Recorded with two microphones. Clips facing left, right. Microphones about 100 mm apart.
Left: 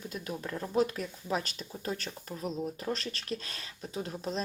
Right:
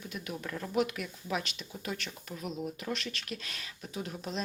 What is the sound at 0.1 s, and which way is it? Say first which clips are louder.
Speech: even; 35° left (ahead or behind).